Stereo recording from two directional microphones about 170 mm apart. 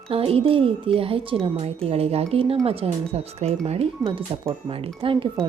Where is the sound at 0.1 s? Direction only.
35° right (ahead or behind).